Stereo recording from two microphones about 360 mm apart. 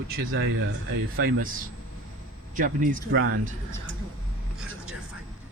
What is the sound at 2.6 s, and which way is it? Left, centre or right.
Speech, right.